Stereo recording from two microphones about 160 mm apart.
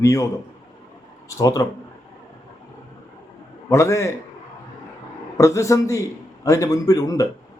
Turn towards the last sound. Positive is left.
turn(degrees=20)  # may be behind; listen again after turning